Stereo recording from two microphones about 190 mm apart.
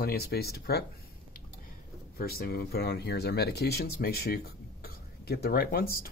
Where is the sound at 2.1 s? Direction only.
55° left (ahead or behind).